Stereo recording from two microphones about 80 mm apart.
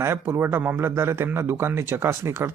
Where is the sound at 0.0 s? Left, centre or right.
Right.